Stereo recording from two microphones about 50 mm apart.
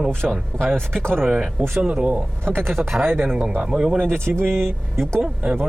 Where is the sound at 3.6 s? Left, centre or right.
Centre.